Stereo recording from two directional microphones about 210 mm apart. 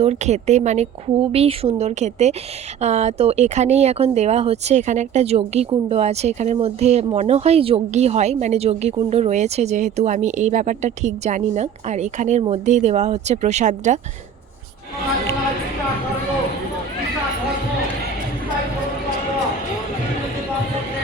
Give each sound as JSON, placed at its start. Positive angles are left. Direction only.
{"t": 0.0, "sound": "speech", "side_deg": -30}